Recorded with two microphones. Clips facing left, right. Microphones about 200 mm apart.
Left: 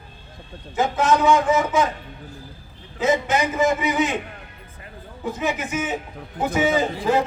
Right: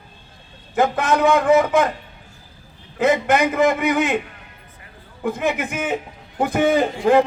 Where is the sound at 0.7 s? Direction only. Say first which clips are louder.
Right 1 dB; 60° right (ahead or behind).